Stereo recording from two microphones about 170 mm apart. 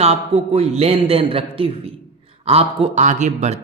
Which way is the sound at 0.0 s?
35° right (ahead or behind).